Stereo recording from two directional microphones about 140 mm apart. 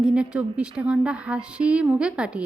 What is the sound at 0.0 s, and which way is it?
A woman's voice, 5° right (ahead or behind).